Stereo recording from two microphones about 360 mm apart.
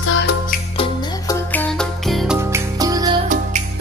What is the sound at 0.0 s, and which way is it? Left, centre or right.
Music, left.